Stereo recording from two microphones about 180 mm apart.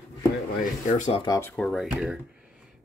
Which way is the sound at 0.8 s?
40° left (ahead or behind).